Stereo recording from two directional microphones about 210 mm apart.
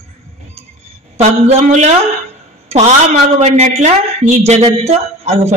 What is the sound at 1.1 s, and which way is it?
Speech, 35° right (ahead or behind).